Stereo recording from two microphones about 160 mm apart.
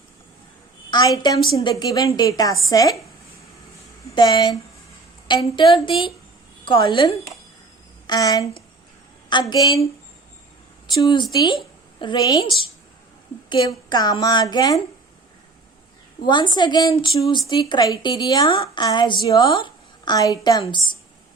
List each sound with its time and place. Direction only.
0.9 s a woman's voice: 25° left (ahead or behind)
4.1 s a woman's voice: 30° left (ahead or behind)
11.0 s a woman's voice: 25° left (ahead or behind)
13.5 s a woman's voice: 25° left (ahead or behind)
16.2 s a woman's voice: 30° left (ahead or behind)